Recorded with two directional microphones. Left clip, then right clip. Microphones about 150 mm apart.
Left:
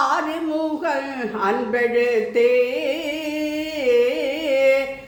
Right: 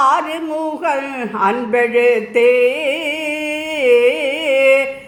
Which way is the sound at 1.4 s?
15° right (ahead or behind).